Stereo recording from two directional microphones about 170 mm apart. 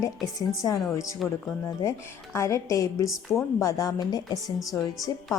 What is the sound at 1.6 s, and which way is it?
A woman's voice, 15° left (ahead or behind).